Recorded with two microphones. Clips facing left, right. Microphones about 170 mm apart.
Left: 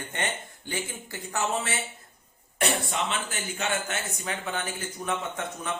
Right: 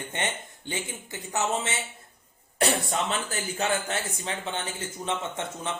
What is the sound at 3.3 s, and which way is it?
Speech, 35° right (ahead or behind).